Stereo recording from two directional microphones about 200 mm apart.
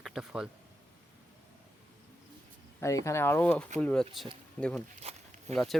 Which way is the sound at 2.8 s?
15° left (ahead or behind).